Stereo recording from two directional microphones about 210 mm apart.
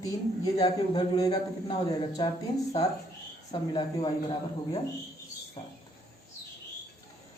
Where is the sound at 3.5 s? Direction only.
25° left (ahead or behind).